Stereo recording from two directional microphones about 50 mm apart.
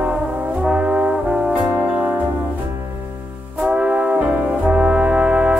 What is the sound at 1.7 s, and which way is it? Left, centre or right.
Music, right.